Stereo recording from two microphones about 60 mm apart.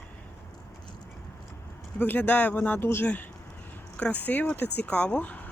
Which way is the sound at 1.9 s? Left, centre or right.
Left.